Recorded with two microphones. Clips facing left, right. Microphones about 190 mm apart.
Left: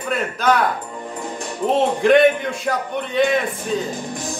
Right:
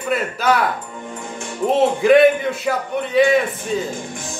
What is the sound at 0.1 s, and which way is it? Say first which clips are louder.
Speech: right 1 dB; 5° right (ahead or behind).